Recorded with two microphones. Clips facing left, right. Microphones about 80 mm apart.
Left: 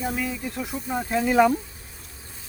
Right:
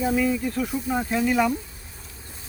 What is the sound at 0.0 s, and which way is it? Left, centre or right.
Speech, centre.